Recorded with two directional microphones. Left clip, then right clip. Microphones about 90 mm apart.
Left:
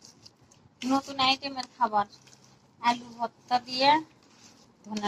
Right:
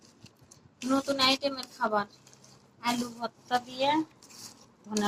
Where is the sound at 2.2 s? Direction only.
35° left (ahead or behind).